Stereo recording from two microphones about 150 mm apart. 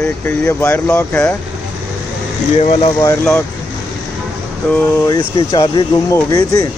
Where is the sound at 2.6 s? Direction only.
45° left (ahead or behind).